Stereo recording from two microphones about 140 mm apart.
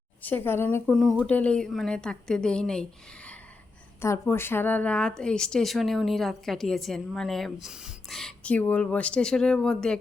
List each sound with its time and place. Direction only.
0.2 s speech: 15° left (ahead or behind)
4.0 s speech: 20° left (ahead or behind)